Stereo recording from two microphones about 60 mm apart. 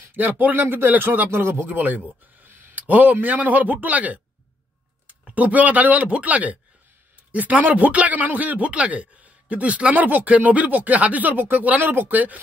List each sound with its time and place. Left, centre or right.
0.1 s speech: right
1.3 s speech: right
1.7 s a man's voice: right